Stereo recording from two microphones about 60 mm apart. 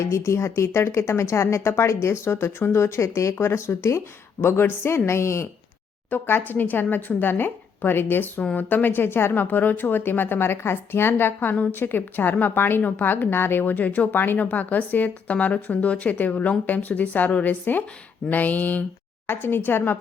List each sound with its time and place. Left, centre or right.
0.0 s a woman's voice: left
3.3 s a woman's voice: left
4.4 s a woman's voice: left
6.1 s a woman's voice: left